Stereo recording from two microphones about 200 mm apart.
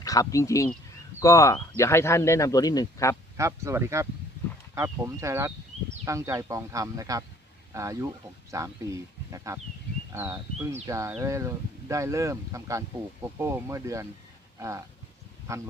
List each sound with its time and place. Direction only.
0.0 s speech: 15° left (ahead or behind)
3.3 s speech: 15° right (ahead or behind)
15.5 s speech: 15° right (ahead or behind)